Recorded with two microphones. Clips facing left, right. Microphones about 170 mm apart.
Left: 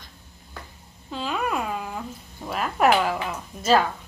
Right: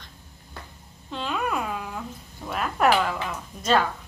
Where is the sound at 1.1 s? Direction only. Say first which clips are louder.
Left 1 dB; 5° left (ahead or behind).